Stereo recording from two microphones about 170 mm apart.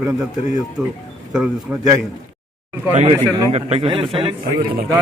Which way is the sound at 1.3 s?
5° right (ahead or behind).